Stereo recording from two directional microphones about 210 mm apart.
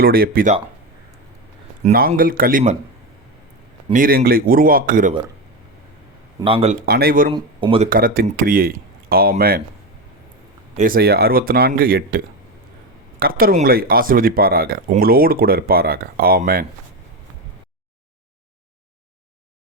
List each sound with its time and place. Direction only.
0.0 s speech: 45° right (ahead or behind)
1.9 s speech: 45° right (ahead or behind)
3.9 s speech: 45° right (ahead or behind)
6.4 s speech: 25° right (ahead or behind)
6.8 s speech: 45° right (ahead or behind)
7.3 s speech: 25° right (ahead or behind)
7.9 s speech: 40° right (ahead or behind)
10.8 s speech: 45° right (ahead or behind)